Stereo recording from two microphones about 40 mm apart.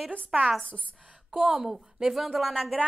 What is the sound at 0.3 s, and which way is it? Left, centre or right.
A woman's voice, centre.